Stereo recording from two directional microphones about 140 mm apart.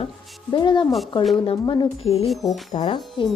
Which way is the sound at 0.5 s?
35° left (ahead or behind).